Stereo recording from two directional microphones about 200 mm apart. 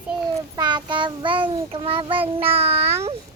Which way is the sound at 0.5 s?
20° right (ahead or behind).